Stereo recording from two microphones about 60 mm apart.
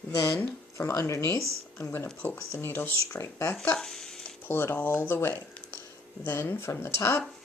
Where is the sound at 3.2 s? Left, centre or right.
Left.